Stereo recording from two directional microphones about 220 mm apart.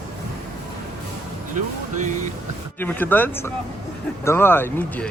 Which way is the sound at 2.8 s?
10° left (ahead or behind).